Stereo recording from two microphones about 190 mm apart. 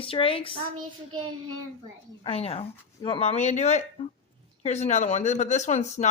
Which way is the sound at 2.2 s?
30° left (ahead or behind).